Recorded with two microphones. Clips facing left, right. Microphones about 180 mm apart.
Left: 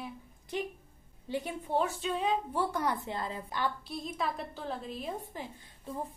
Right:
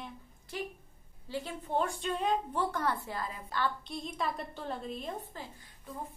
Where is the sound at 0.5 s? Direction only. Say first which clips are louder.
Left 4 dB; 20° left (ahead or behind).